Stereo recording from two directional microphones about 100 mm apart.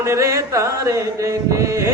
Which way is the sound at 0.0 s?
30° right (ahead or behind).